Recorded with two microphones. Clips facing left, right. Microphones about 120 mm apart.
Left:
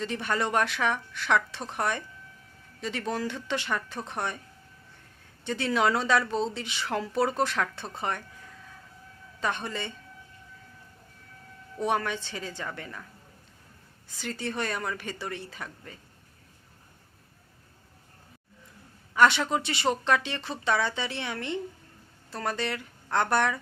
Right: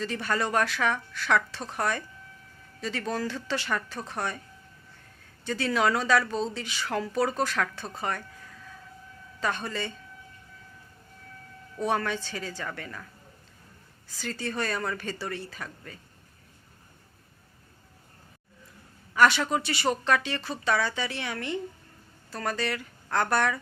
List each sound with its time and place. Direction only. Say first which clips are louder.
0.0 s speech: even; 20° left (ahead or behind)
5.5 s speech: even; 20° left (ahead or behind)
9.4 s speech: right 1 dB; 20° left (ahead or behind)
11.8 s speech: even; 20° left (ahead or behind)
14.1 s speech: even; 20° left (ahead or behind)
19.1 s speech: even; 20° left (ahead or behind)